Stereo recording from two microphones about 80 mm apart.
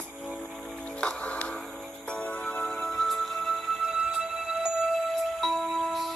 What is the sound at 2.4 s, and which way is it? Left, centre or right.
Music, centre.